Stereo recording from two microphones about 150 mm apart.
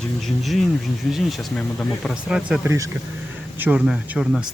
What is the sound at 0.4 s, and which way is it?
Speech, centre (ahead or behind).